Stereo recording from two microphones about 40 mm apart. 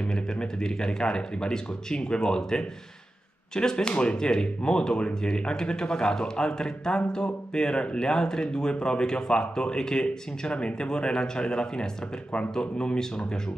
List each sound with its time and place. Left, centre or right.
0.0 s speech: left